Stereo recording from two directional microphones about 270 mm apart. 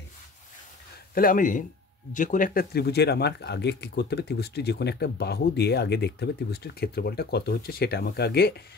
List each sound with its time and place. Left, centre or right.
1.1 s speech: left